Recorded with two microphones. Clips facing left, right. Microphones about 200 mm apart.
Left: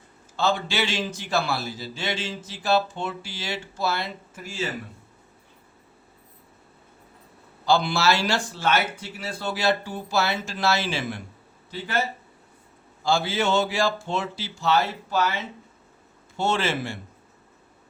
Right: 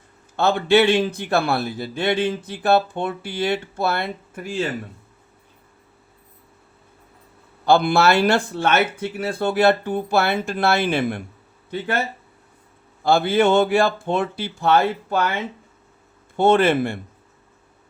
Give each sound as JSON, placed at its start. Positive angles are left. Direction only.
{"t": 0.3, "sound": "a man's voice", "side_deg": -60}
{"t": 7.6, "sound": "a man's voice", "side_deg": -55}